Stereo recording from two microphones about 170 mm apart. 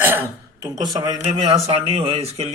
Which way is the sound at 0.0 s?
10° right (ahead or behind).